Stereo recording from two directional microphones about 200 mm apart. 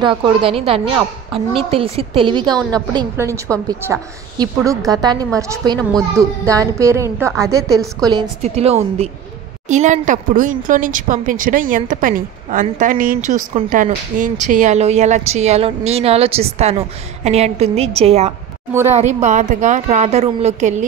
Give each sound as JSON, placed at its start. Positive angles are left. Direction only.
{"t": 0.0, "sound": "a woman's voice", "side_deg": -25}
{"t": 8.4, "sound": "a woman's voice", "side_deg": -30}